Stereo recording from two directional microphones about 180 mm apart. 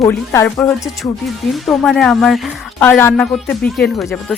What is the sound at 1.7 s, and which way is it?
Speech, centre (ahead or behind).